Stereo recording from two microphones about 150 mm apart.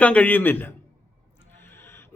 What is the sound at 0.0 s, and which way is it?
A man's voice, 10° left (ahead or behind).